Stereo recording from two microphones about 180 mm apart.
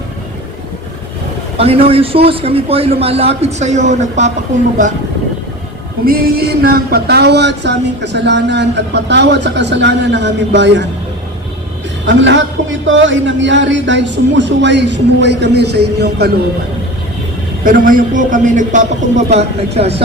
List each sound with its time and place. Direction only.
1.5 s a man's voice: 30° right (ahead or behind)
6.1 s a sound: 60° right (ahead or behind); by 10.8 s 80° right
12.0 s a man's voice: 90° right; by 16.3 s 65° right (ahead or behind)
17.6 s a man's voice: 50° right (ahead or behind)